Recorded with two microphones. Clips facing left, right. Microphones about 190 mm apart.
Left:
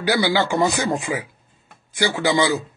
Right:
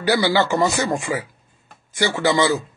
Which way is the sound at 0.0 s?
10° left (ahead or behind).